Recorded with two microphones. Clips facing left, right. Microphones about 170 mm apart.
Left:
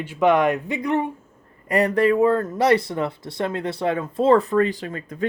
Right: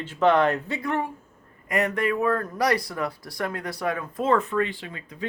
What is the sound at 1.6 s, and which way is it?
Speech, 35° left (ahead or behind).